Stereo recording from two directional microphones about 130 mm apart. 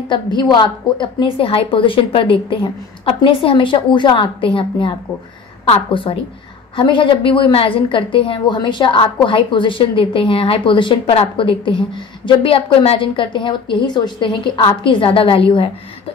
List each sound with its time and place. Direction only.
0.1 s a woman's voice: 35° left (ahead or behind)